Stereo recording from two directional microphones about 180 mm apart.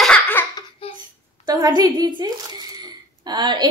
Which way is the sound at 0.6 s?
30° left (ahead or behind).